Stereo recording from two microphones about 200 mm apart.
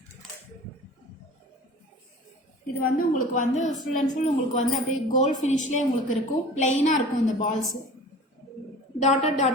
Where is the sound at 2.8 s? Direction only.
40° left (ahead or behind).